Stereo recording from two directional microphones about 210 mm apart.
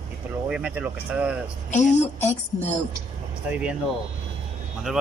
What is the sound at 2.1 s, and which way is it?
Speech, 10° left (ahead or behind).